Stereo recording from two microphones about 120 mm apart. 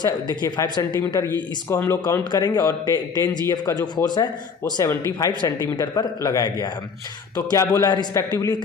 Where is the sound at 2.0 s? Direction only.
35° left (ahead or behind).